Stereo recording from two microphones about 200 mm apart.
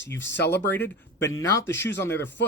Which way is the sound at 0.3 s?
60° left (ahead or behind).